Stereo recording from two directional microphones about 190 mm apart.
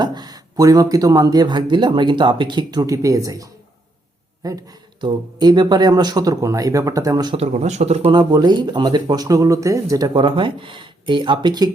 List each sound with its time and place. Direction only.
0.0 s speech: 20° right (ahead or behind)
7.3 s speech: 35° right (ahead or behind)